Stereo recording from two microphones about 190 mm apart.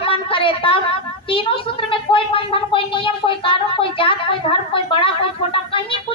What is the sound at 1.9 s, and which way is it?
Speech, 30° left (ahead or behind).